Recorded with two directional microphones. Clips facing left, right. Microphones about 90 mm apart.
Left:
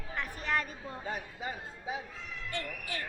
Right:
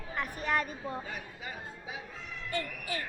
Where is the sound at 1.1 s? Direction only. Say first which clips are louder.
Left 4 dB; 30° left (ahead or behind).